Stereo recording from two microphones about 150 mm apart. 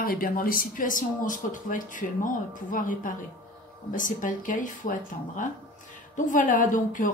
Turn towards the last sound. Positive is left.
turn(degrees=60)  # may be behind; listen again after turning